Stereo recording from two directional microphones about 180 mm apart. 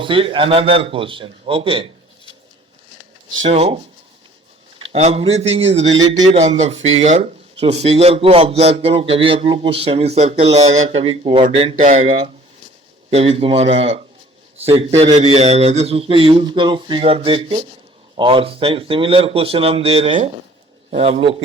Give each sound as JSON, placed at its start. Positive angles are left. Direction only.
{"t": 0.0, "sound": "a man's voice", "side_deg": -30}
{"t": 3.4, "sound": "a man's voice", "side_deg": -35}
{"t": 4.8, "sound": "a man's voice", "side_deg": -35}